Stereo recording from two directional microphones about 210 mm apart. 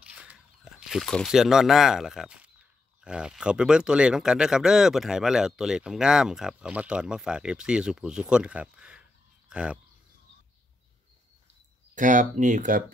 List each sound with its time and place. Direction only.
0.0 s a sound: 5° right (ahead or behind)
3.0 s speech: 5° right (ahead or behind)
11.9 s speech: 40° right (ahead or behind)